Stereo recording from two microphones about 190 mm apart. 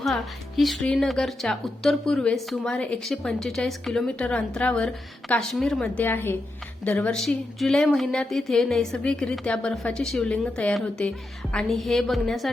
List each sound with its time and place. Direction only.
0.0 s a woman's voice: centre (ahead or behind)